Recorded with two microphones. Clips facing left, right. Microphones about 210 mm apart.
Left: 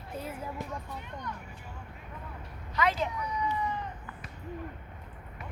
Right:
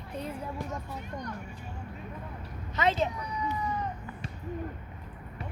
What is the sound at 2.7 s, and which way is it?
Speech, 25° right (ahead or behind).